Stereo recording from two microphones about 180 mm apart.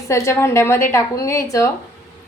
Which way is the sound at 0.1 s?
15° left (ahead or behind).